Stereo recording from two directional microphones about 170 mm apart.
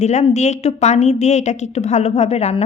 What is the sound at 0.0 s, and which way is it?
A woman's voice, 40° left (ahead or behind).